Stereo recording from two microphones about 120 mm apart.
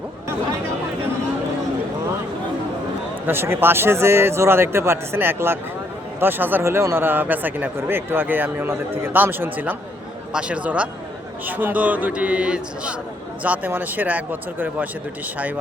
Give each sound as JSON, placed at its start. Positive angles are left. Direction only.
{"t": 3.2, "sound": "speech", "side_deg": -20}